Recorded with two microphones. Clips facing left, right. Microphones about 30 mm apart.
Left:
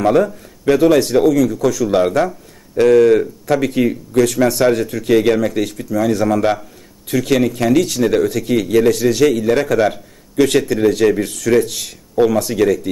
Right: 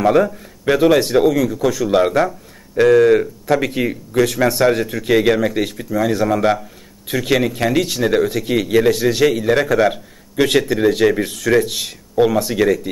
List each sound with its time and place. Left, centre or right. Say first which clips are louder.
0.0 s speech: even; centre